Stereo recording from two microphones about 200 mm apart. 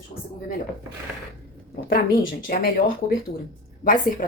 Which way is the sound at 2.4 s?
45° left (ahead or behind).